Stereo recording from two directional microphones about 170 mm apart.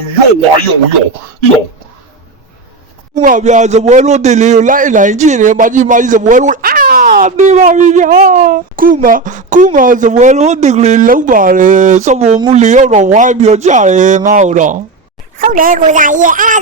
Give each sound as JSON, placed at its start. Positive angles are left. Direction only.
{"t": 3.2, "sound": "a man's voice", "side_deg": -50}